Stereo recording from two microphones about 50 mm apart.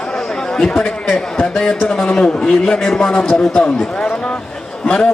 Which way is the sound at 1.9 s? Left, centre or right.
Centre.